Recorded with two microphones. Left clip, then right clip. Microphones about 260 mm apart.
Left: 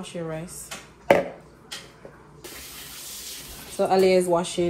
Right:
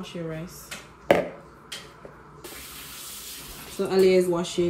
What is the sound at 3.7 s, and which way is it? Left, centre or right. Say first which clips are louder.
Speech: left 1 dB; centre.